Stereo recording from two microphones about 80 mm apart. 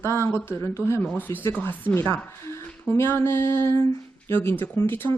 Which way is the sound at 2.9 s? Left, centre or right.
Left.